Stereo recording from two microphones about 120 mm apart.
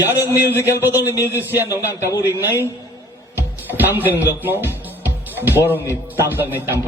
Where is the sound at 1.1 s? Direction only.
25° left (ahead or behind).